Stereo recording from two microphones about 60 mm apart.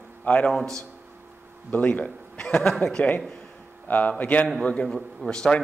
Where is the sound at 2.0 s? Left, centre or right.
Centre.